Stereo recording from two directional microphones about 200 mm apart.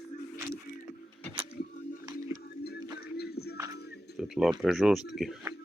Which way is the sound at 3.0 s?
50° left (ahead or behind).